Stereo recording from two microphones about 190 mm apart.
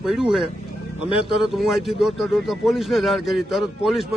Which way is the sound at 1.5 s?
Centre (ahead or behind).